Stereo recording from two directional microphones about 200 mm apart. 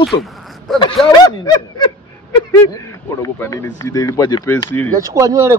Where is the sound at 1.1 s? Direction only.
20° left (ahead or behind).